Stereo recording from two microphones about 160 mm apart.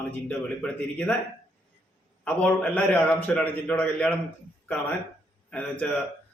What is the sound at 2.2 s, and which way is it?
A man's voice, 5° left (ahead or behind).